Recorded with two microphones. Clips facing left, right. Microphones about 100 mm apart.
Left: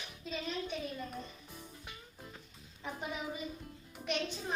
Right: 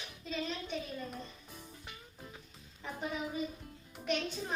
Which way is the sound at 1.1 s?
Centre (ahead or behind).